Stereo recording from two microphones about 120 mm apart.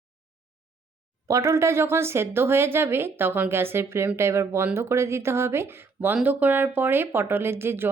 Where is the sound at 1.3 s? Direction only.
25° right (ahead or behind).